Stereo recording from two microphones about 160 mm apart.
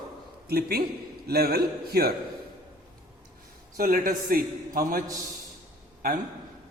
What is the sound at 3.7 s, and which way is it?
A man's voice, 60° right (ahead or behind).